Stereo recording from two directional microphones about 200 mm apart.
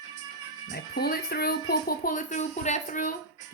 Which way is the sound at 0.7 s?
50° left (ahead or behind).